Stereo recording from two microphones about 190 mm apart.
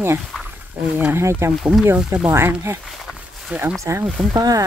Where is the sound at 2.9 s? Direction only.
5° right (ahead or behind).